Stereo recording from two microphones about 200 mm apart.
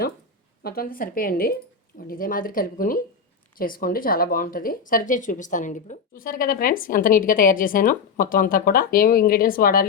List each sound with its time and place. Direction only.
0.6 s speech: 50° left (ahead or behind)